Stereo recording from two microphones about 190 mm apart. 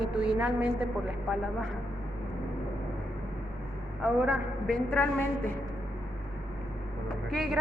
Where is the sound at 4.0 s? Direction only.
5° right (ahead or behind).